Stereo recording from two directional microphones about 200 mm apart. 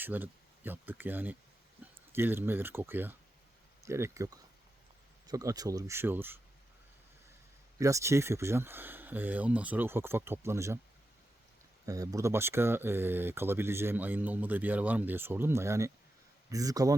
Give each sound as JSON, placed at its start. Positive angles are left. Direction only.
{"t": 0.0, "sound": "speech", "side_deg": -10}
{"t": 7.8, "sound": "speech", "side_deg": -15}
{"t": 11.9, "sound": "speech", "side_deg": -15}